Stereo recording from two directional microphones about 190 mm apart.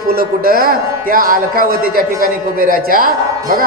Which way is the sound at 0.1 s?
50° right (ahead or behind).